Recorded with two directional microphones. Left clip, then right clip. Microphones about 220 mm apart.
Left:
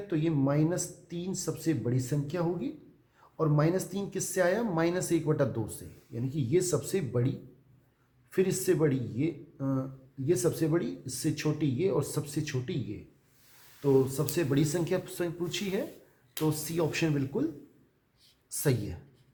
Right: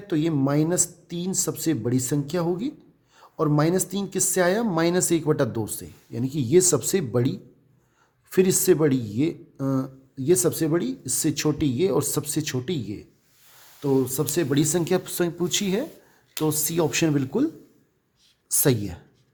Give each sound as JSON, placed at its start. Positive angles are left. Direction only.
{"t": 0.1, "sound": "speech", "side_deg": -50}
{"t": 14.3, "sound": "speech", "side_deg": -50}
{"t": 18.4, "sound": "speech", "side_deg": -45}